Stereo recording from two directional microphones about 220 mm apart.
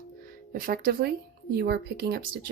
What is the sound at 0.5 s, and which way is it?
A woman's voice, 40° right (ahead or behind).